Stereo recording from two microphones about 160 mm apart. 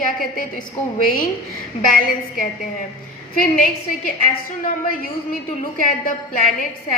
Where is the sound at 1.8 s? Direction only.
60° left (ahead or behind).